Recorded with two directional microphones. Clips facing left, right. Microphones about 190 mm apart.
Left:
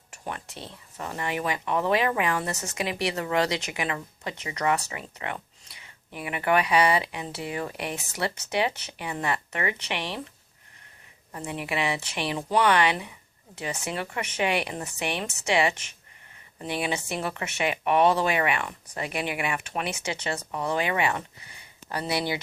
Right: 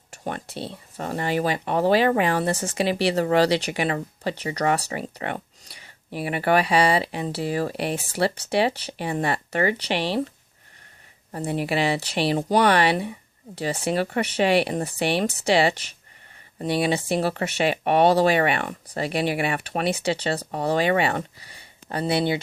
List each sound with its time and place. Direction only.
0.1 s speech: 35° right (ahead or behind)
11.3 s speech: 35° right (ahead or behind)